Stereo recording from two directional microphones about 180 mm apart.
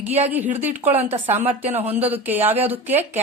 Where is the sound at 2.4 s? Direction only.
35° right (ahead or behind).